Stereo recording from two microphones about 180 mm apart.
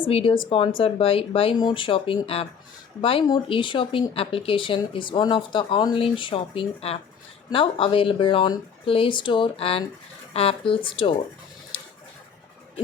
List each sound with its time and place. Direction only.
0.0 s speech: 30° left (ahead or behind)